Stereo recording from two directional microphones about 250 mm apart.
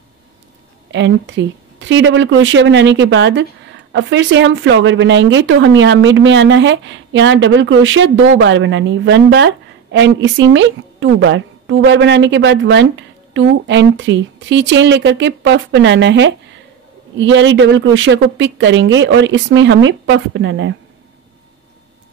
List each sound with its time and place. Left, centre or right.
0.9 s speech: right